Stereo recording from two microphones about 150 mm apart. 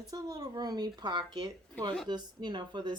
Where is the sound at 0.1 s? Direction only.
25° right (ahead or behind).